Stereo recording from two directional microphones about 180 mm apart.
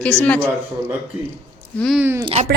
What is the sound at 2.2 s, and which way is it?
Speech, 35° right (ahead or behind).